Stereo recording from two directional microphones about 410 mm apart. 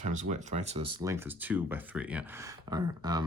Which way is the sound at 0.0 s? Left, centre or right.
Centre.